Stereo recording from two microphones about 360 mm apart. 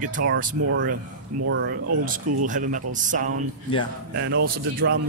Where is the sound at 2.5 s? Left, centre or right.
Right.